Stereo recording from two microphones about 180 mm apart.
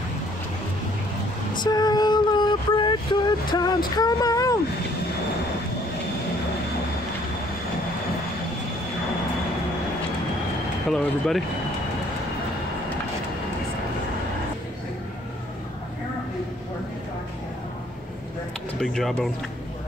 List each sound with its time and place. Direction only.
1.6 s a sound: 20° left (ahead or behind)
10.9 s speech: centre (ahead or behind)
18.8 s speech: centre (ahead or behind)